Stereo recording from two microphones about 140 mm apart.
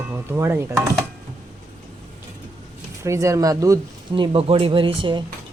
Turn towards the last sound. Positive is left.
turn(degrees=-35)  # may be behind; listen again after turning